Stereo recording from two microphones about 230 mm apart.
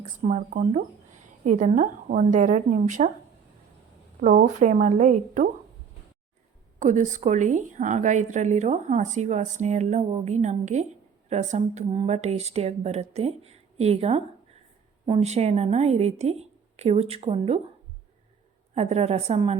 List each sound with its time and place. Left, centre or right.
0.2 s a woman's voice: right
4.2 s a woman's voice: right
6.7 s a woman's voice: right
18.7 s speech: right